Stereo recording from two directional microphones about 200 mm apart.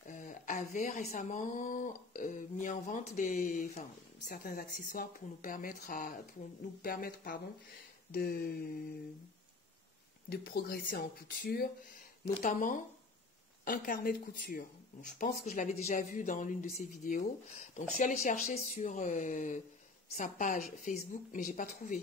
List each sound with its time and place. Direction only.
0.1 s speech: 35° left (ahead or behind)
4.3 s speech: 45° left (ahead or behind)
10.3 s speech: 50° left (ahead or behind)